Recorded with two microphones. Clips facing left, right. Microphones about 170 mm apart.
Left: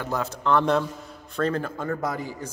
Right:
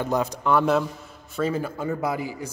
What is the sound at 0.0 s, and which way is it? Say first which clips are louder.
A man's voice: right 3 dB; 15° right (ahead or behind).